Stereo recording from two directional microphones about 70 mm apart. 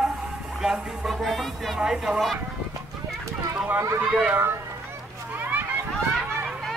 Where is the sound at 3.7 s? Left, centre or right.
Right.